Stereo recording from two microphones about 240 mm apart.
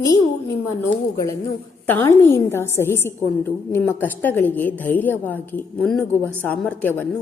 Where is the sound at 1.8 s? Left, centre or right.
Centre.